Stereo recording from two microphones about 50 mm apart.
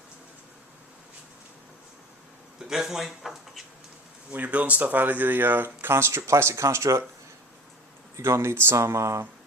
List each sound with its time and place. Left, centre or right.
2.6 s speech: centre
4.3 s speech: right
8.1 s speech: right
8.7 s speech: right